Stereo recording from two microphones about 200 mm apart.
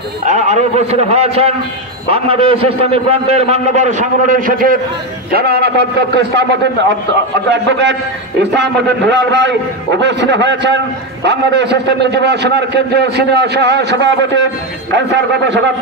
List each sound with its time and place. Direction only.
0.3 s a man's voice: 35° right (ahead or behind); by 15.6 s 60° right (ahead or behind)